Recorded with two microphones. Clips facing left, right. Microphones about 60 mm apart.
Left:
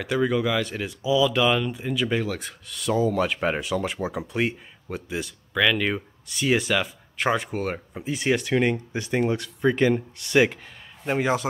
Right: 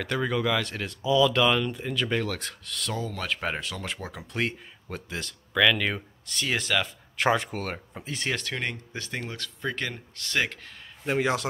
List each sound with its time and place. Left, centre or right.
0.0 s a man's voice: centre